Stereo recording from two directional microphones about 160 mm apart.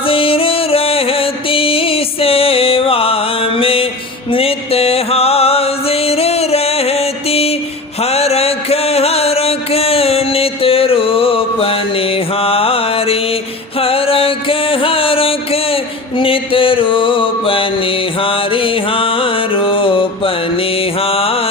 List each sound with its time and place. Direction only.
0.0 s music: 35° left (ahead or behind)